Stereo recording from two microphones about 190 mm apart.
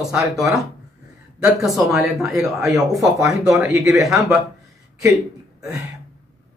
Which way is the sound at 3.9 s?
15° right (ahead or behind).